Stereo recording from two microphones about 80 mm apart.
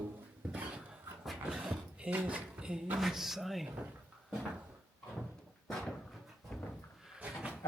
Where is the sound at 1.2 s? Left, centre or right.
Centre.